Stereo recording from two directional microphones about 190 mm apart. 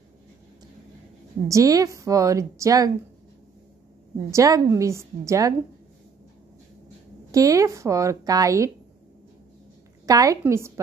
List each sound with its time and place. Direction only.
1.5 s speech: 20° right (ahead or behind)
4.3 s speech: 15° right (ahead or behind)
7.2 s speech: 15° right (ahead or behind)
10.0 s speech: 20° right (ahead or behind)